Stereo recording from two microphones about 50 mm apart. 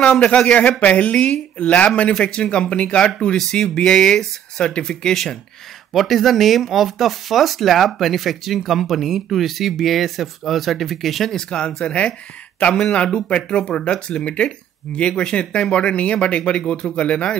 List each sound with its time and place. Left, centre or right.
0.6 s speech: left; by 11.3 s centre
11.3 s speech: centre